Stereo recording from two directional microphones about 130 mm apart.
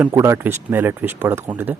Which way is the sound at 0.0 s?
20° right (ahead or behind).